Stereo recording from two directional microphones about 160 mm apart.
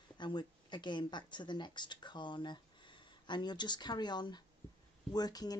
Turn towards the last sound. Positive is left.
turn(degrees=25)  # may be behind; listen again after turning